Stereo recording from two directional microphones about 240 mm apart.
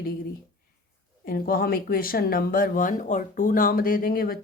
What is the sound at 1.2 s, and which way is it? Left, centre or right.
Speech, left.